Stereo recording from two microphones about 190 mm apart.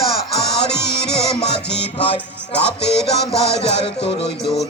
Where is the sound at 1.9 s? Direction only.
30° left (ahead or behind).